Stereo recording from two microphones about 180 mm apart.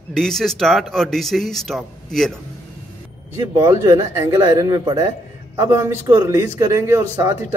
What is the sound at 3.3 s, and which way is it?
A man's voice, 15° right (ahead or behind).